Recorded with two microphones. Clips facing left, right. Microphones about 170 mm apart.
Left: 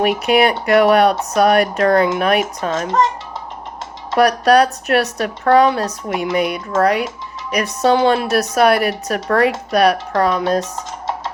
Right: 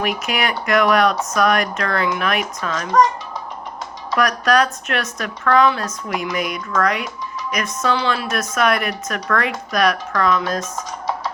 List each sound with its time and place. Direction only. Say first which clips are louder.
0.3 s speech: left 10 dB; 30° left (ahead or behind)
4.1 s speech: left 5 dB; 35° left (ahead or behind)